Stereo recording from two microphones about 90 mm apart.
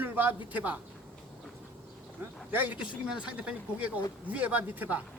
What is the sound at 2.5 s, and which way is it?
Speech, 20° right (ahead or behind).